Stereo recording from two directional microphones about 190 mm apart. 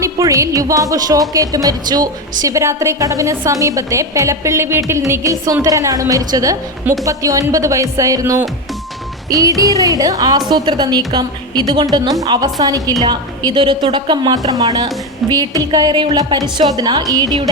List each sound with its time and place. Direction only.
0.0 s a woman's voice: 15° right (ahead or behind)